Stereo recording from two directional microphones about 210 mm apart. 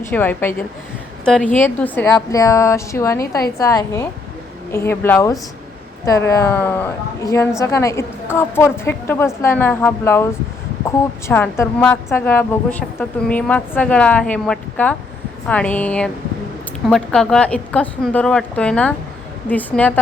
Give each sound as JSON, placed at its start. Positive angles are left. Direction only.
{"t": 0.1, "sound": "a woman's voice", "side_deg": 10}